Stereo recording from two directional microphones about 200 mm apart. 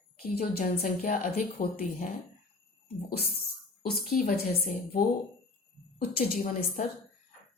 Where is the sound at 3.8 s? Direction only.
45° left (ahead or behind).